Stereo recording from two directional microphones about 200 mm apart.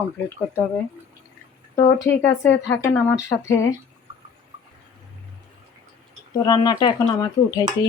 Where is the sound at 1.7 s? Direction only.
15° left (ahead or behind).